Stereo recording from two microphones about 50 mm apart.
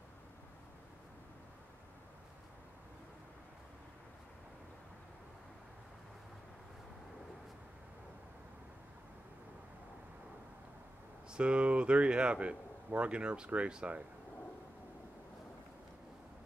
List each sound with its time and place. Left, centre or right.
11.2 s speech: right